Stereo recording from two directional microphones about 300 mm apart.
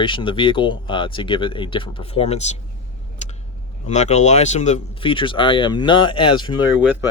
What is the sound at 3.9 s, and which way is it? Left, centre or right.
Speech, left.